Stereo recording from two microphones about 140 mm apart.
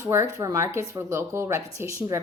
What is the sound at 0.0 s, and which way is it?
A woman's voice, 20° right (ahead or behind).